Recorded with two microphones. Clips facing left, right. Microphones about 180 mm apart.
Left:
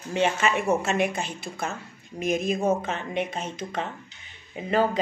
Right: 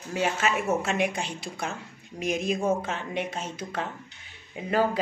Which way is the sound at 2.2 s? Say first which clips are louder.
Left 3 dB; 55° left (ahead or behind).